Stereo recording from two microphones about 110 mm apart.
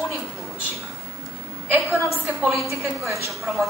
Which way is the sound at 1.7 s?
15° right (ahead or behind).